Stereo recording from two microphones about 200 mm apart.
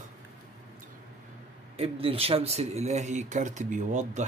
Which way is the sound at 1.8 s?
30° right (ahead or behind).